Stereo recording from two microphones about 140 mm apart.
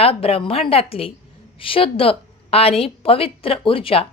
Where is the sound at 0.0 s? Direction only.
45° left (ahead or behind).